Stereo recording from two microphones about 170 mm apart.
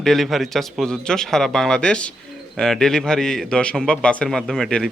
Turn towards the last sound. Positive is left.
turn(degrees=0)  # may be behind; listen again after turning